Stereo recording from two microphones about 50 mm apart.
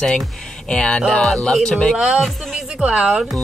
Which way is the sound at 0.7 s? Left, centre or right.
Centre.